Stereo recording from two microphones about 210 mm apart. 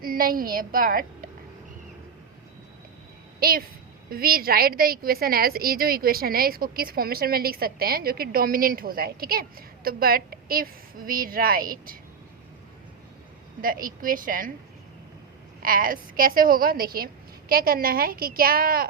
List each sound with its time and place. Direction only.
0.0 s a woman's voice: 45° right (ahead or behind)
3.4 s a woman's voice: 45° right (ahead or behind)
13.6 s a woman's voice: 40° right (ahead or behind)
15.6 s a woman's voice: 40° right (ahead or behind)